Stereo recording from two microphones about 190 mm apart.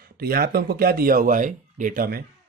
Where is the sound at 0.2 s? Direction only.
55° right (ahead or behind).